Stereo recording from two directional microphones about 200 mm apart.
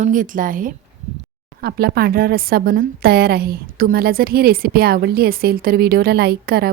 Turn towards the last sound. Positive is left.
turn(degrees=-50)  # may be behind; listen again after turning